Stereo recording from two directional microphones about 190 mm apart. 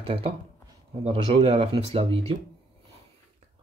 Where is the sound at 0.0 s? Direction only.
30° right (ahead or behind).